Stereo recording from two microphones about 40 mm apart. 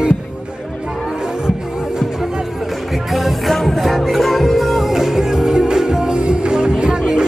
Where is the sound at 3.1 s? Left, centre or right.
Centre.